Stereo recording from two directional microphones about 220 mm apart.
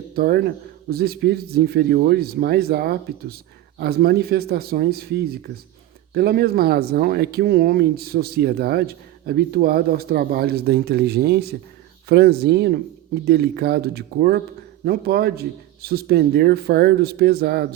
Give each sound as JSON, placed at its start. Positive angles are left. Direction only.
{"t": 0.2, "sound": "speech", "side_deg": -45}